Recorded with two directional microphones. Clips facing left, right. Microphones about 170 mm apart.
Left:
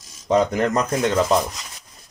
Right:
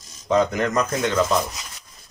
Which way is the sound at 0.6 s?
35° left (ahead or behind).